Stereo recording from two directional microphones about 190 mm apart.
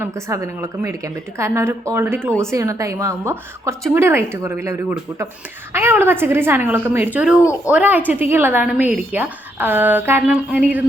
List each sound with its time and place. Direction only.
0.0 s a woman's voice: 15° right (ahead or behind)
7.4 s speech: 15° left (ahead or behind)
7.7 s a woman's voice: 10° right (ahead or behind)